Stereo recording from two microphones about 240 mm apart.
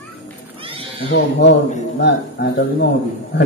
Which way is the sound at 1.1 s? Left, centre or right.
Left.